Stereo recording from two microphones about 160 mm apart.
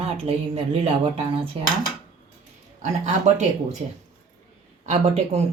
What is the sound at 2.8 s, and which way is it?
Speech, 50° right (ahead or behind).